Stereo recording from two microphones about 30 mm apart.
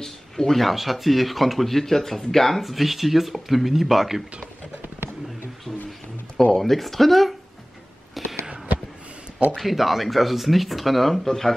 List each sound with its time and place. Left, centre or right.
0.0 s a sound: centre
0.6 s speech: centre
2.6 s speech: centre
6.5 s speech: centre
8.2 s a sound: centre
9.6 s speech: centre
11.2 s speech: centre